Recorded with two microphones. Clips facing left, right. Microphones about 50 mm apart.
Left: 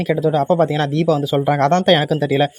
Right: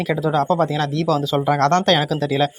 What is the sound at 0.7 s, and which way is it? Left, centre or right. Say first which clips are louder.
Speech: left 3 dB; left.